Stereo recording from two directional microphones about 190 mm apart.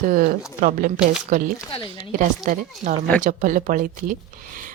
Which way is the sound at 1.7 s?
25° left (ahead or behind).